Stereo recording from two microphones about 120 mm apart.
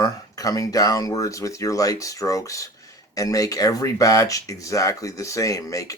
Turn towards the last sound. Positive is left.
turn(degrees=30)  # may be behind; listen again after turning